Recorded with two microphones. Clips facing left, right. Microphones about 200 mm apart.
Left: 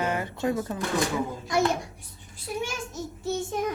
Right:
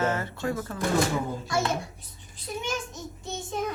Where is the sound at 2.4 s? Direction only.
10° left (ahead or behind).